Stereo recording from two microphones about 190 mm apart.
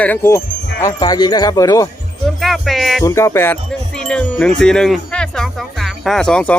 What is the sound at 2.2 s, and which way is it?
Speech, centre (ahead or behind).